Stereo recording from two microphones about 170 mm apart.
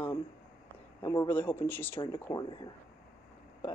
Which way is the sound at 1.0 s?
20° left (ahead or behind).